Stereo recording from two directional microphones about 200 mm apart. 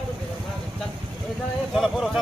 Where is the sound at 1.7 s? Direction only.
Centre (ahead or behind).